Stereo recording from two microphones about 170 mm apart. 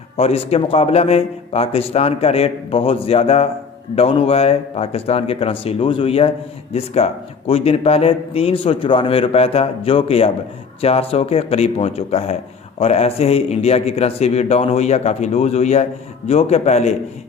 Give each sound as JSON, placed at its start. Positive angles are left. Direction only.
{"t": 0.2, "sound": "a man's voice", "side_deg": 35}